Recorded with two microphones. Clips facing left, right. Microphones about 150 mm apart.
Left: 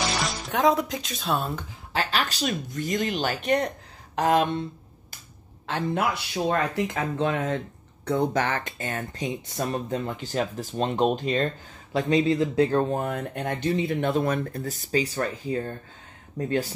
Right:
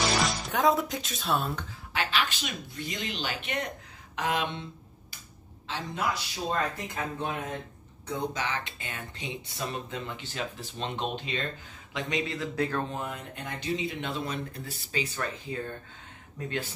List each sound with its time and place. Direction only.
0.2 s speech: centre (ahead or behind)
2.0 s speech: 40° left (ahead or behind)
5.7 s speech: 55° left (ahead or behind)
11.9 s speech: 30° left (ahead or behind)
12.8 s speech: 50° left (ahead or behind)